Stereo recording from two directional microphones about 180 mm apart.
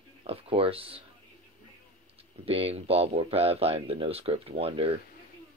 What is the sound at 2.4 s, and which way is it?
Speech, 35° right (ahead or behind).